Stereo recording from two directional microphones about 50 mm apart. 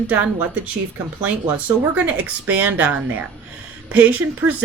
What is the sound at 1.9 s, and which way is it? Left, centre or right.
Speech, right.